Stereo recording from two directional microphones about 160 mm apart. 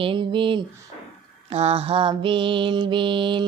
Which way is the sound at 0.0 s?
30° right (ahead or behind).